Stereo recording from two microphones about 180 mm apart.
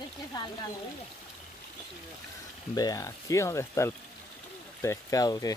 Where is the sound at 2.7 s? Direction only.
20° left (ahead or behind).